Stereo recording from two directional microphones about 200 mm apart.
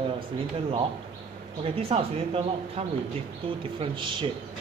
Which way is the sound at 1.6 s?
30° right (ahead or behind).